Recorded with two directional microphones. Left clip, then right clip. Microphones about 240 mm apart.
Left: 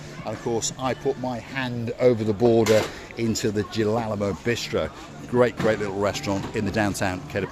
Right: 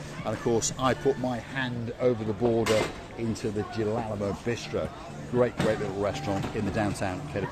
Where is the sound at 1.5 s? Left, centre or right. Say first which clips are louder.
Left 3 dB; left.